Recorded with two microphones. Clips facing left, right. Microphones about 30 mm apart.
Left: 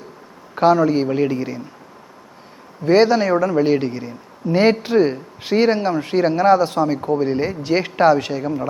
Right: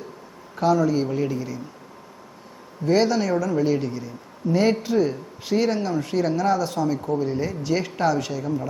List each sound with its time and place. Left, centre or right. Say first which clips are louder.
0.5 s a man's voice: left 5 dB; left
2.8 s a man's voice: left 6 dB; left